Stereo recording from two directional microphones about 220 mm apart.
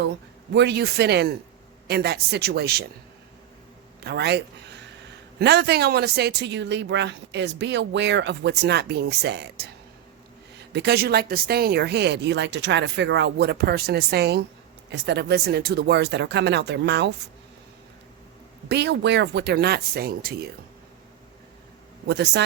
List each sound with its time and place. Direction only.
0.5 s speech: 50° right (ahead or behind)
4.0 s speech: 50° right (ahead or behind)
10.7 s speech: 50° right (ahead or behind)
18.7 s speech: 50° right (ahead or behind)
22.0 s speech: 50° right (ahead or behind)